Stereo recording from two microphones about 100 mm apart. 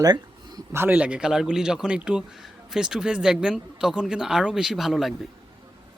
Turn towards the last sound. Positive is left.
turn(degrees=0)  # may be behind; listen again after turning